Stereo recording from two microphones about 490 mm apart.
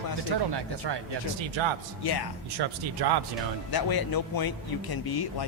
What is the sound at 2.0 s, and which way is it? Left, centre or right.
Speech, left.